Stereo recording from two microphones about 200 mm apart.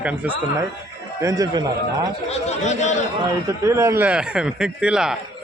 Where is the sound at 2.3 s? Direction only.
35° left (ahead or behind).